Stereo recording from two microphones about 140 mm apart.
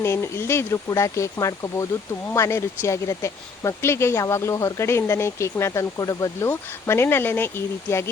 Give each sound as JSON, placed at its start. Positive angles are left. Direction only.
{"t": 0.0, "sound": "speech", "side_deg": 20}